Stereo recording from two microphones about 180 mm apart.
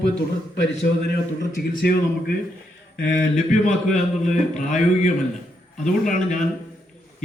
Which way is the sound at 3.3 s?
45° left (ahead or behind).